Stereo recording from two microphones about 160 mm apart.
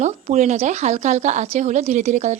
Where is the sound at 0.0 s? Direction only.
45° right (ahead or behind).